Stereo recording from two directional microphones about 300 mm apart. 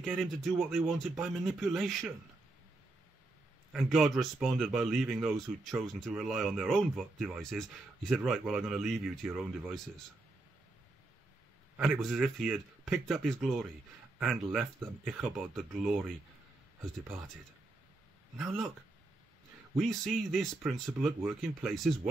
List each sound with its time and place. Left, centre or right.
0.0 s speech: centre
3.7 s speech: centre
11.7 s speech: centre
18.4 s speech: centre
19.7 s speech: centre